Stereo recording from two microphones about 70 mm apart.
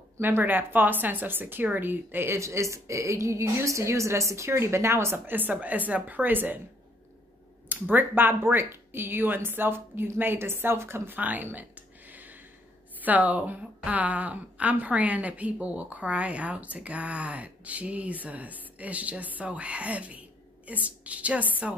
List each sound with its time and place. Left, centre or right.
0.2 s speech: right
7.6 s speech: right
11.1 s a sound: right
13.0 s a woman's voice: right